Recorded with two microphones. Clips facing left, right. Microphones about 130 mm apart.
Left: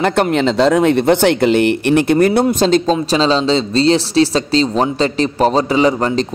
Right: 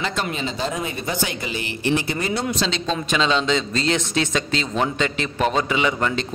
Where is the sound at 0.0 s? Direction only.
60° left (ahead or behind).